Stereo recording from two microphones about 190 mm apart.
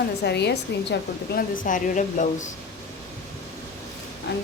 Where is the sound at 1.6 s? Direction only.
45° left (ahead or behind).